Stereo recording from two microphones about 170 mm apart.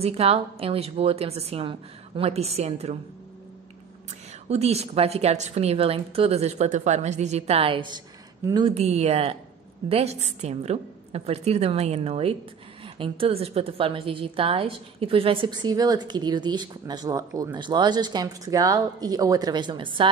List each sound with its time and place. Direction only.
0.0 s a woman's voice: 35° right (ahead or behind)
4.5 s a woman's voice: 40° right (ahead or behind)